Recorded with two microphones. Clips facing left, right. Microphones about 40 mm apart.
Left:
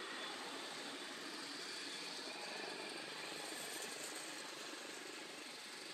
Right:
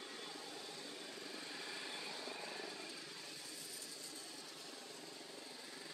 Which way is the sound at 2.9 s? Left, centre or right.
Left.